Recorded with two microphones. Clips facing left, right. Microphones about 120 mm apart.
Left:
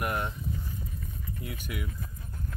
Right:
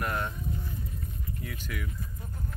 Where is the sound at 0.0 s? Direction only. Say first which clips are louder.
Left 1 dB; 15° left (ahead or behind).